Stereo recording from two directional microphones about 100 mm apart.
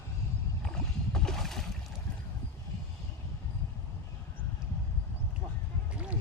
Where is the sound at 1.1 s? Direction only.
5° left (ahead or behind).